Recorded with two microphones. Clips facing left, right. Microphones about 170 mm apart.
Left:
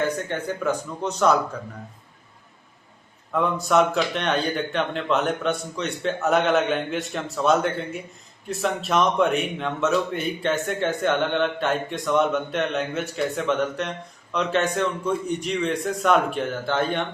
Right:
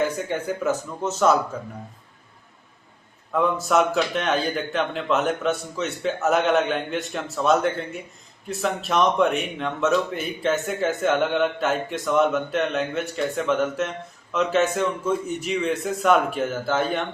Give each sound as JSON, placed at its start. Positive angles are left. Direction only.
{"t": 0.3, "sound": "speech", "side_deg": -5}
{"t": 3.3, "sound": "speech", "side_deg": 0}